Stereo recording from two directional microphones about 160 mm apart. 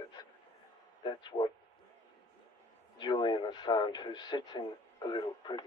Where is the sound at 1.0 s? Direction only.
25° left (ahead or behind).